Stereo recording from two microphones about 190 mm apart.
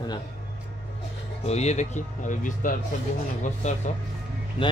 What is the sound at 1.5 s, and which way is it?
Speech, 35° left (ahead or behind).